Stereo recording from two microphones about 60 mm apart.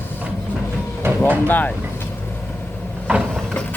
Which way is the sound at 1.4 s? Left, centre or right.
Left.